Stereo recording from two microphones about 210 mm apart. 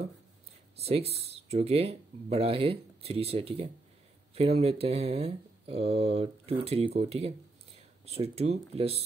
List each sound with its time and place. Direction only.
0.7 s speech: 30° right (ahead or behind)